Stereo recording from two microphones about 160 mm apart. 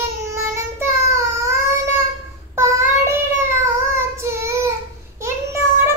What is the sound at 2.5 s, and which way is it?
Child singing, 15° right (ahead or behind).